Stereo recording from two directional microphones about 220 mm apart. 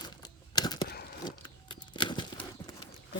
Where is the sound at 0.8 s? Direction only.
45° left (ahead or behind).